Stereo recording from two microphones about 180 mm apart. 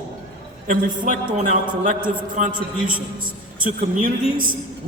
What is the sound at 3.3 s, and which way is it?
A man's voice, 50° right (ahead or behind).